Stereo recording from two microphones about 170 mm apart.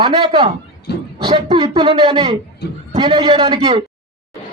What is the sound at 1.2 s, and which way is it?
A woman's voice, 30° right (ahead or behind).